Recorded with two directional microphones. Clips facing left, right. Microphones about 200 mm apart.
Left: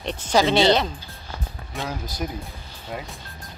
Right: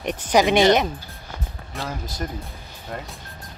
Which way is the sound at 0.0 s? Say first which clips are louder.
Right 2 dB; 15° right (ahead or behind).